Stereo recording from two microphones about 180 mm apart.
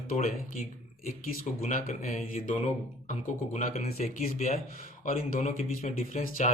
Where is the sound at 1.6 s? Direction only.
45° left (ahead or behind).